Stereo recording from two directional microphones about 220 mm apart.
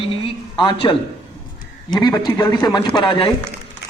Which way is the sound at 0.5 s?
20° left (ahead or behind).